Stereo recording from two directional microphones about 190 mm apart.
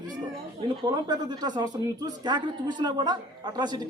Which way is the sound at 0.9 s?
20° right (ahead or behind).